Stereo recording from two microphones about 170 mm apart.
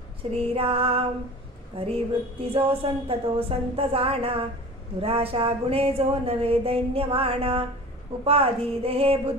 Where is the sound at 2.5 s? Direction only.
35° right (ahead or behind).